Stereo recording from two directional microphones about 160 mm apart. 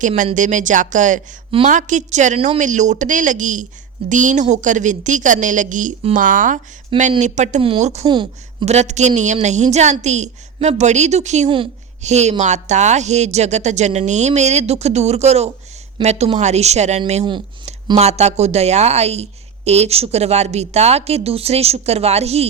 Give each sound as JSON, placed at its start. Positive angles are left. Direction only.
{"t": 0.3, "sound": "a woman's voice", "side_deg": -50}
{"t": 8.0, "sound": "speech", "side_deg": -30}
{"t": 8.6, "sound": "a woman's voice", "side_deg": -45}